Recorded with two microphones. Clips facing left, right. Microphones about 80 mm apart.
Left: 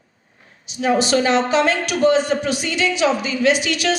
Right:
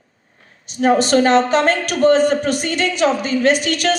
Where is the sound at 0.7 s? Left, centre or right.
Right.